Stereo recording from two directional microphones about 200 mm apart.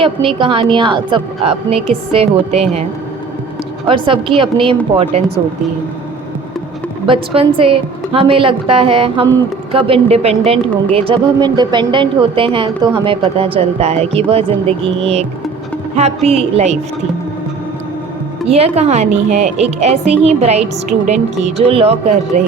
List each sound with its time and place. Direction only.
0.0 s a woman's voice: 25° right (ahead or behind)
3.8 s a woman's voice: 25° right (ahead or behind)
7.1 s a woman's voice: 25° right (ahead or behind)
18.4 s a woman's voice: 30° right (ahead or behind)